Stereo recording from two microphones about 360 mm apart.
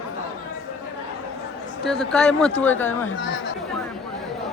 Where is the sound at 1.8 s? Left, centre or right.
Centre.